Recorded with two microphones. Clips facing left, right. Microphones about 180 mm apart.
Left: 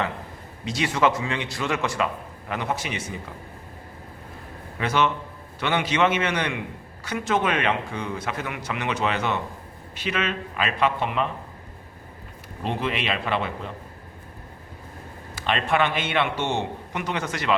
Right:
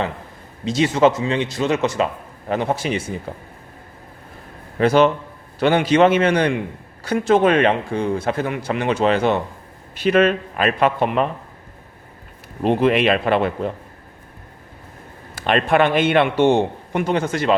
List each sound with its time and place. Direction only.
0.6 s a man's voice: 25° right (ahead or behind)
4.8 s a man's voice: 35° right (ahead or behind)
10.0 s a man's voice: 50° right (ahead or behind)
12.6 s a man's voice: 55° right (ahead or behind)
15.4 s a man's voice: 55° right (ahead or behind)